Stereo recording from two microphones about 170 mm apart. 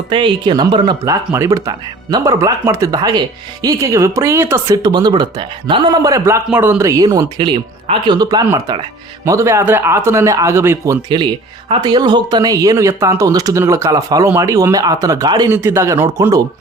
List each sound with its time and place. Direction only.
0.1 s speech: 30° right (ahead or behind); by 11.0 s 15° right (ahead or behind)
11.1 s speech: 25° right (ahead or behind)